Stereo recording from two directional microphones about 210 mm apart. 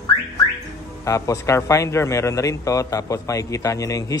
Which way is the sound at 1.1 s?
15° left (ahead or behind).